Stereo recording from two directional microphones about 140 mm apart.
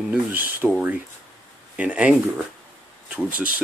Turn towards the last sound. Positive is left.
turn(degrees=-10)  # may be behind; listen again after turning